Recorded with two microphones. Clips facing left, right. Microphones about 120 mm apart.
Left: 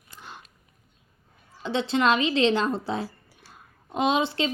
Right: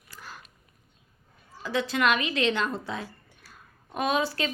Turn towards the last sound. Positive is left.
turn(degrees=25)  # may be behind; listen again after turning